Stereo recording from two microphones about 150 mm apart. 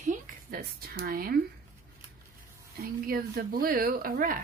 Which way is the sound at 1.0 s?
80° right.